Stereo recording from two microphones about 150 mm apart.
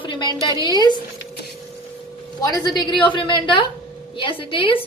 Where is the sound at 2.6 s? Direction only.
30° left (ahead or behind).